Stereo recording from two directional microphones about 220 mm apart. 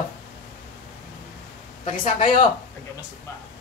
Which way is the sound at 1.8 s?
35° left (ahead or behind).